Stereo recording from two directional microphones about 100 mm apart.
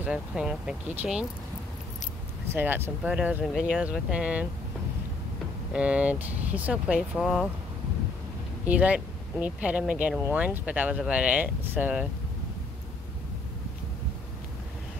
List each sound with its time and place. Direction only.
0.0 s speech: 5° right (ahead or behind)
2.5 s speech: 20° right (ahead or behind)
3.0 s speech: 10° right (ahead or behind)
3.4 s speech: centre (ahead or behind)
5.7 s speech: 10° right (ahead or behind)
7.2 s speech: centre (ahead or behind)
8.6 s speech: 15° right (ahead or behind)